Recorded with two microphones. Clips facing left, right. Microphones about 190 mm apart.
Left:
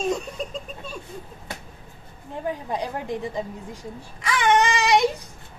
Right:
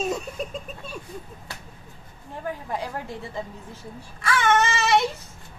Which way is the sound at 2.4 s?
20° left (ahead or behind).